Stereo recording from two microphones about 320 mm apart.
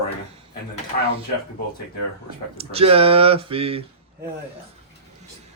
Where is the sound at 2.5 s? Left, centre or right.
Centre.